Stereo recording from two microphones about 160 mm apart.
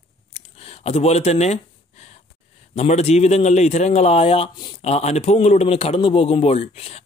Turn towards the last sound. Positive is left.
turn(degrees=40)  # may be behind; listen again after turning